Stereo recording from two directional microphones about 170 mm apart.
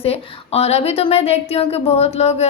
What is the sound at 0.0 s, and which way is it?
A woman's voice, 35° left (ahead or behind).